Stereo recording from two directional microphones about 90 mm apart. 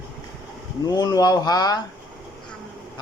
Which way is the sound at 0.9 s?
45° left (ahead or behind).